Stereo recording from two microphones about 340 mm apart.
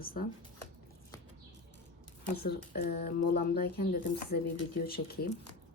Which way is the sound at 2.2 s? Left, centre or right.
Left.